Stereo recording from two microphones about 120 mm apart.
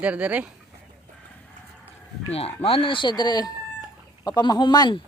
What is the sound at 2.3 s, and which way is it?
Speech, 50° left (ahead or behind).